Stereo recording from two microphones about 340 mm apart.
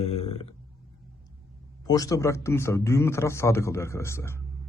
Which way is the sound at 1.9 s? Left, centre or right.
Centre.